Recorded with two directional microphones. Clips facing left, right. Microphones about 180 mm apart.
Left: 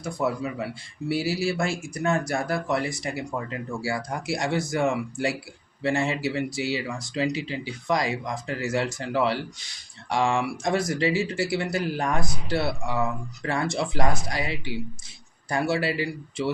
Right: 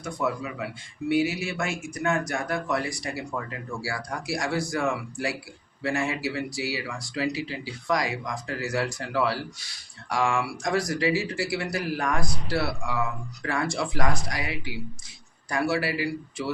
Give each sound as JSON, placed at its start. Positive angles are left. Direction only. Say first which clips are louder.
{"t": 0.2, "sound": "speech", "louder": "left 2 dB", "side_deg": 30}